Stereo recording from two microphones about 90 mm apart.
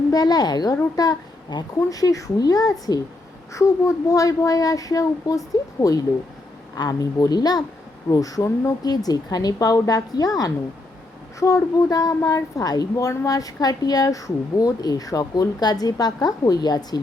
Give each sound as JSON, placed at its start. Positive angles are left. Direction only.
{"t": 0.1, "sound": "a woman's voice", "side_deg": 45}
{"t": 9.0, "sound": "a woman's voice", "side_deg": 45}